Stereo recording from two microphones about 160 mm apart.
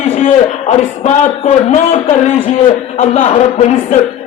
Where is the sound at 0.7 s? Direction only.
45° left (ahead or behind).